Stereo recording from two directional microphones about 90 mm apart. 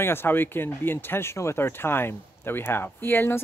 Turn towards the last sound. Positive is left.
turn(degrees=25)  # may be behind; listen again after turning